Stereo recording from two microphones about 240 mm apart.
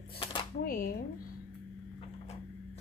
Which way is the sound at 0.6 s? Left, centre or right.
Left.